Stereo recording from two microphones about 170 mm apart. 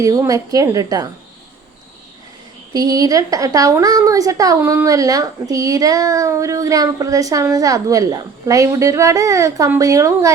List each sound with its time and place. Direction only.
0.0 s a woman's voice: 20° right (ahead or behind)
2.7 s a woman's voice: 20° right (ahead or behind)